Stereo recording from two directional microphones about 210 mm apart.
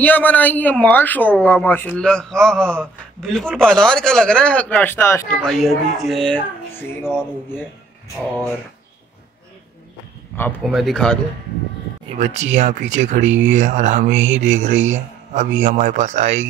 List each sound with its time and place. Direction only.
0.0 s speech: 5° left (ahead or behind)
10.3 s speech: 5° left (ahead or behind)
12.2 s speech: 35° right (ahead or behind)